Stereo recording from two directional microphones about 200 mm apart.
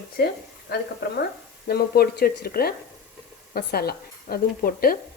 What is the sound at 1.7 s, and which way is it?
Speech, 50° left (ahead or behind).